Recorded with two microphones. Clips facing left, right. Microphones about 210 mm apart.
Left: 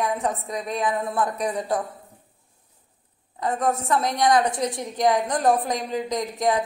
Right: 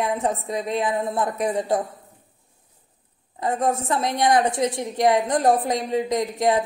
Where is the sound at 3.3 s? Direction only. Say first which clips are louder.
Right 1 dB; 25° right (ahead or behind).